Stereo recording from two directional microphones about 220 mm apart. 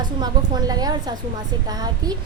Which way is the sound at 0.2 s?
20° right (ahead or behind).